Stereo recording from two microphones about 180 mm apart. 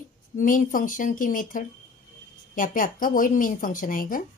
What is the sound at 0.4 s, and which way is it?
Speech, 45° left (ahead or behind).